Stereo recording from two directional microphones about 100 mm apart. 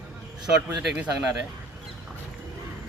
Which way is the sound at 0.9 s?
15° right (ahead or behind).